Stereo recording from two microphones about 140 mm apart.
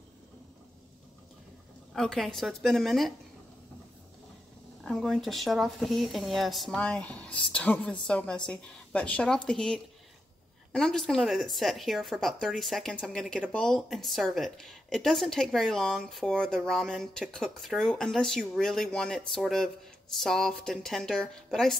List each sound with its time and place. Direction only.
2.0 s a woman's voice: centre (ahead or behind)
4.8 s a woman's voice: centre (ahead or behind)